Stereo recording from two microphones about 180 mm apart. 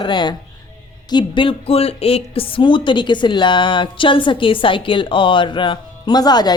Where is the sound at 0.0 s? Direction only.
25° left (ahead or behind).